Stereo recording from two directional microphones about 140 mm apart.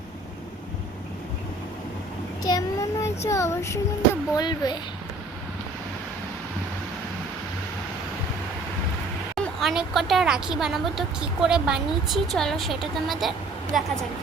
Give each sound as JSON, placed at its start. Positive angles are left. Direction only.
{"t": 2.4, "sound": "child singing", "side_deg": 25}
{"t": 4.4, "sound": "child singing", "side_deg": 30}
{"t": 9.3, "sound": "speech", "side_deg": 0}